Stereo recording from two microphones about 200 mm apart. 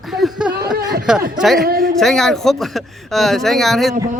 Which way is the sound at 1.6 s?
50° right (ahead or behind).